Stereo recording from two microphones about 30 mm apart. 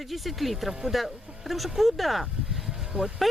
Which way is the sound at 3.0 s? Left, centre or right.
Right.